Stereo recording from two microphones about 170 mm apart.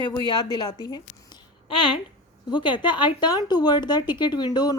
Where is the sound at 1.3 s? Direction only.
30° left (ahead or behind).